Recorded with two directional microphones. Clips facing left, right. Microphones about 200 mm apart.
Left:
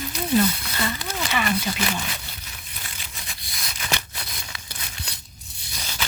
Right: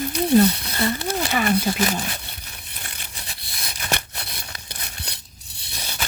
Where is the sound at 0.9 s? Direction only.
40° right (ahead or behind).